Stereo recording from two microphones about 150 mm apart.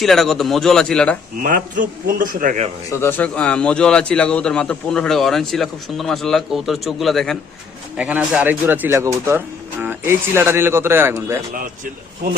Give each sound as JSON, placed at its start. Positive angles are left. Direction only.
{"t": 0.0, "sound": "a man's voice", "side_deg": 0}
{"t": 1.4, "sound": "a man's voice", "side_deg": -65}
{"t": 2.9, "sound": "a man's voice", "side_deg": 15}